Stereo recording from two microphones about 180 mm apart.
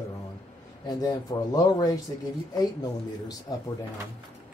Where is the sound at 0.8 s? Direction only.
20° left (ahead or behind).